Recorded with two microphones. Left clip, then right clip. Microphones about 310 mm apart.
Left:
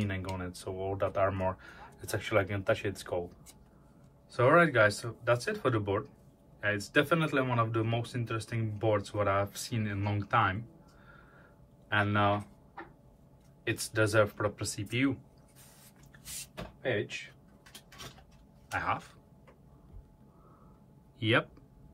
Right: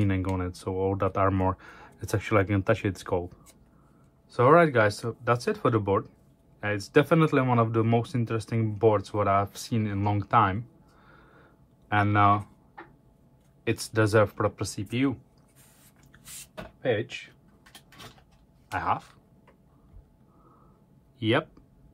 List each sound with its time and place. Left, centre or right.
0.1 s speech: right
4.3 s speech: centre
13.7 s speech: centre
16.3 s speech: centre
18.8 s speech: centre
21.2 s speech: centre